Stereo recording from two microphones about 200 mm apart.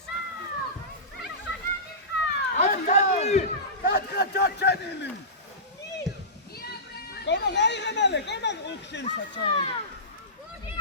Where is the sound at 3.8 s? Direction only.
55° left (ahead or behind).